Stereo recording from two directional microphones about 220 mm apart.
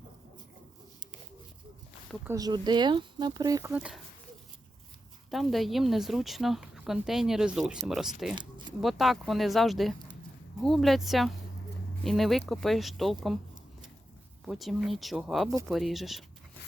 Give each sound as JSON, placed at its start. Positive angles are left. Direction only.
{"t": 2.2, "sound": "speech", "side_deg": -15}
{"t": 5.3, "sound": "speech", "side_deg": 0}
{"t": 14.4, "sound": "speech", "side_deg": 0}